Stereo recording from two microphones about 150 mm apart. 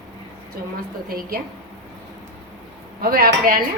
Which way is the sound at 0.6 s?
90° right.